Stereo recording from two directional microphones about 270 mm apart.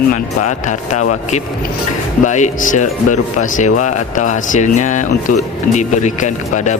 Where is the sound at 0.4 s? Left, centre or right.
Left.